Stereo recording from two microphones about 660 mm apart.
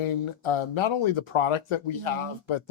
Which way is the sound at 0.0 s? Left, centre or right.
Left.